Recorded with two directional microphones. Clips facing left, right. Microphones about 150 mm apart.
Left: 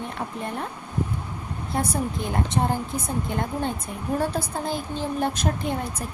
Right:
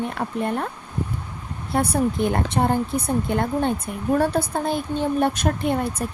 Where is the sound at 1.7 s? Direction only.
65° right (ahead or behind).